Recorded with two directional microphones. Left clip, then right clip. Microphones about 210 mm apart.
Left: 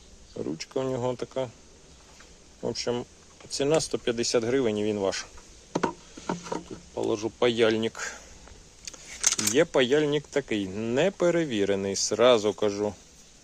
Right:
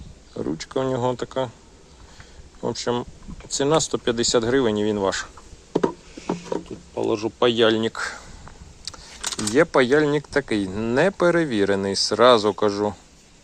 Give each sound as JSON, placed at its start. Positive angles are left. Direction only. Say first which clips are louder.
{"t": 0.3, "sound": "speech", "louder": "right 5 dB", "side_deg": 0}
{"t": 2.6, "sound": "speech", "louder": "right 5 dB", "side_deg": 5}
{"t": 6.5, "sound": "a sound", "louder": "right 8 dB", "side_deg": 35}
{"t": 6.9, "sound": "speech", "louder": "right 5 dB", "side_deg": 5}
{"t": 8.8, "sound": "a sound", "louder": "left 3 dB", "side_deg": 25}
{"t": 9.6, "sound": "speech", "louder": "right 6 dB", "side_deg": 5}